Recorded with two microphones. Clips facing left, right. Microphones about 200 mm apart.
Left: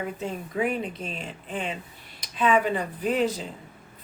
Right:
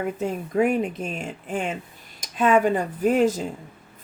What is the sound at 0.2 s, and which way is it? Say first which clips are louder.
Speech: right 7 dB; 50° right (ahead or behind).